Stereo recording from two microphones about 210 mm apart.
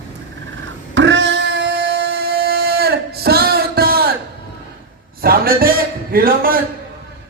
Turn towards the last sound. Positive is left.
turn(degrees=-45)  # may be behind; listen again after turning